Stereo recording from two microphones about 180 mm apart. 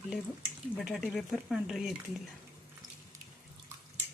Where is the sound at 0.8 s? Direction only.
Centre (ahead or behind).